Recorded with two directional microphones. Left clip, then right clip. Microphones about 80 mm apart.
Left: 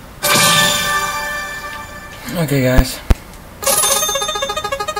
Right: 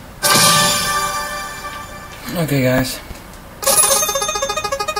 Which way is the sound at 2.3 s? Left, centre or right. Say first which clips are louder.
Left 1 dB; left.